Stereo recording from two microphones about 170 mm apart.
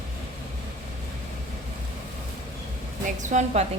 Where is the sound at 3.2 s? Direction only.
45° right (ahead or behind).